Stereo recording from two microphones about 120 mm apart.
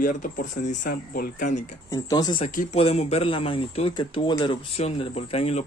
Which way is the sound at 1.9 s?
35° left (ahead or behind).